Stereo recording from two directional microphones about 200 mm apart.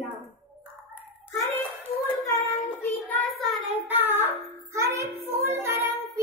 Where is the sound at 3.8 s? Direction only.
10° right (ahead or behind).